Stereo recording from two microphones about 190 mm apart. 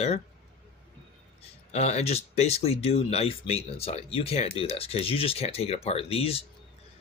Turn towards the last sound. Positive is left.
turn(degrees=30)  # may be behind; listen again after turning